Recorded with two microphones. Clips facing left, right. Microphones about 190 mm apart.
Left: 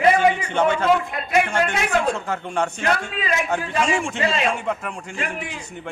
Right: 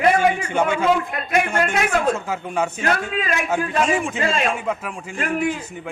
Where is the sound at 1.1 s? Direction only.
55° right (ahead or behind).